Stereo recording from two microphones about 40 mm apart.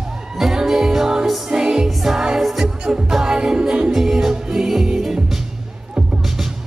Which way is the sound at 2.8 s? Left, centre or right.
Centre.